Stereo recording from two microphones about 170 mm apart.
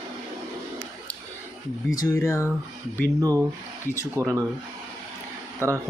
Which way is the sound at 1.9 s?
20° left (ahead or behind).